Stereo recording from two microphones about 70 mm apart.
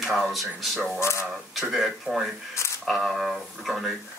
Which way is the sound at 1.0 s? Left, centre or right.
Left.